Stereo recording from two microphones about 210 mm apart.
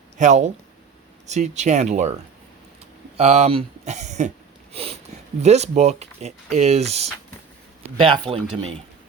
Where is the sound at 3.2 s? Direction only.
30° right (ahead or behind).